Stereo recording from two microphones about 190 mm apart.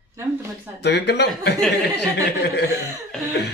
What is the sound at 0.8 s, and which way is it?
Speech, 65° left (ahead or behind).